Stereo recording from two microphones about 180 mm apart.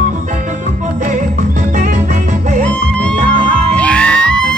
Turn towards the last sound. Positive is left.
turn(degrees=5)  # may be behind; listen again after turning